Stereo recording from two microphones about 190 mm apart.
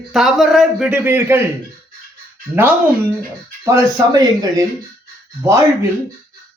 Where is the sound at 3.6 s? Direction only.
15° right (ahead or behind).